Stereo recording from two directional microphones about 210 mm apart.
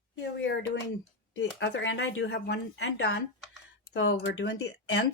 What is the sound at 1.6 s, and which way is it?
Speech, 60° left (ahead or behind).